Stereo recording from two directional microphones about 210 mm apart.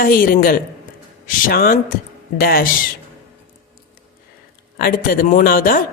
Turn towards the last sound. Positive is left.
turn(degrees=40)  # may be behind; listen again after turning